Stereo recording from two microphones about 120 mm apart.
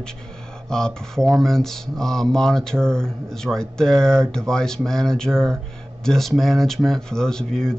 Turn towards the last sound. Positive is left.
turn(degrees=5)  # may be behind; listen again after turning